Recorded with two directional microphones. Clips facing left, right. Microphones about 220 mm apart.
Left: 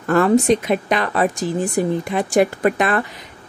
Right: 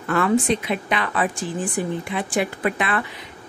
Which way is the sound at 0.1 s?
40° left (ahead or behind).